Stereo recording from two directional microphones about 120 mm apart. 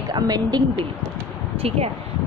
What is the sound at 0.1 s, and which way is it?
Speech, 35° right (ahead or behind).